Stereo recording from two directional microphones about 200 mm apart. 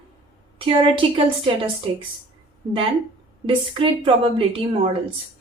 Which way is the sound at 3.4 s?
25° right (ahead or behind).